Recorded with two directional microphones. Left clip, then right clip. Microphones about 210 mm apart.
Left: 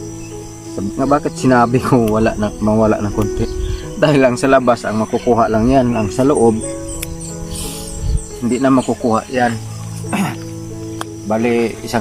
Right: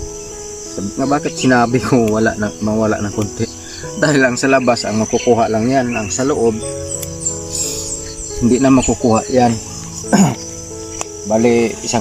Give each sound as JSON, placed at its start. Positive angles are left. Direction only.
{"t": 0.9, "sound": "speech", "side_deg": 5}
{"t": 8.4, "sound": "speech", "side_deg": -15}
{"t": 10.1, "sound": "speech", "side_deg": -30}
{"t": 11.3, "sound": "speech", "side_deg": -15}